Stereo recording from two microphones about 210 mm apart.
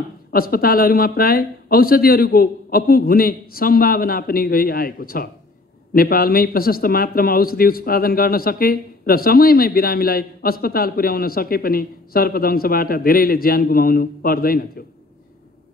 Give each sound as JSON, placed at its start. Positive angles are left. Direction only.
{"t": 0.3, "sound": "a man's voice", "side_deg": 45}